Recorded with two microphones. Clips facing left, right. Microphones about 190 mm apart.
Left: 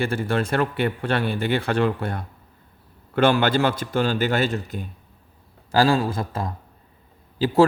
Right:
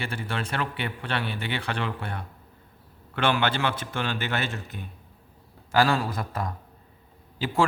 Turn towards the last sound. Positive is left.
turn(degrees=35)  # may be behind; listen again after turning